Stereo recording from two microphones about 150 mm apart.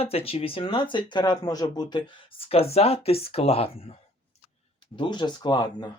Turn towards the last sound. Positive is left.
turn(degrees=30)  # may be behind; listen again after turning